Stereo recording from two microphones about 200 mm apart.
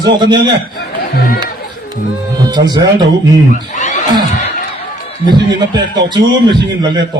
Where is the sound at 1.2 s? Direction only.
50° left (ahead or behind).